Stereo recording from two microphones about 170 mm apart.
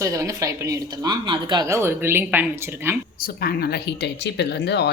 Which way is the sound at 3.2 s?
60° left (ahead or behind).